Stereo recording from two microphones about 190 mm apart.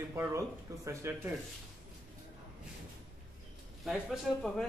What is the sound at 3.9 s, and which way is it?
Speech, centre (ahead or behind).